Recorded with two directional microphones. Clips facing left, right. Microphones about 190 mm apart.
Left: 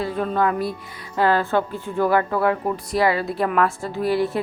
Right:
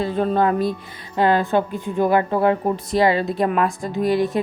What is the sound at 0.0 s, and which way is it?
A woman's voice, 25° right (ahead or behind).